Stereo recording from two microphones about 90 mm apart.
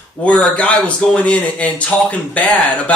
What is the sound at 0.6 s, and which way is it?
Speech, 15° left (ahead or behind).